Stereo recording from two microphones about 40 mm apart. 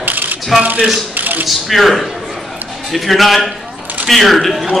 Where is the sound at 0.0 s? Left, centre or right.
Right.